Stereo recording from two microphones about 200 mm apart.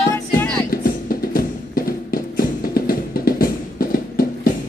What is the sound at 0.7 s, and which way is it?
Music, 45° left (ahead or behind).